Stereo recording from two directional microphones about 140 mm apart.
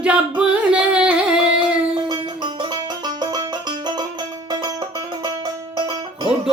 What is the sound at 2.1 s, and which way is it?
Music, 30° right (ahead or behind).